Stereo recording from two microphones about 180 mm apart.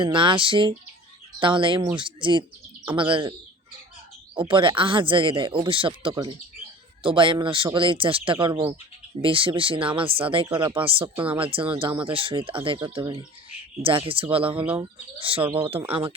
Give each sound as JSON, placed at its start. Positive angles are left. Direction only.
{"t": 0.0, "sound": "speech", "side_deg": -25}
{"t": 4.4, "sound": "speech", "side_deg": -25}